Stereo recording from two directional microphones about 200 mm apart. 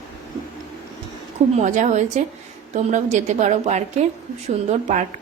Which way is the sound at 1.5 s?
40° right (ahead or behind).